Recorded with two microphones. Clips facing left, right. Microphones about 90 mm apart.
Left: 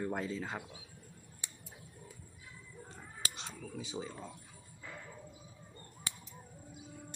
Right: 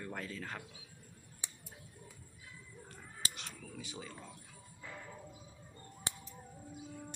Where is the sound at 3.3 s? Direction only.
20° left (ahead or behind).